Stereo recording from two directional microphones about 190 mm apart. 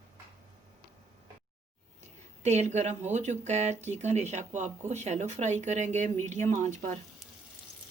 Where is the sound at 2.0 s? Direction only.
35° right (ahead or behind).